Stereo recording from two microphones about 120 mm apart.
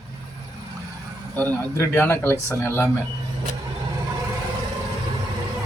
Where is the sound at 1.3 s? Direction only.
15° left (ahead or behind).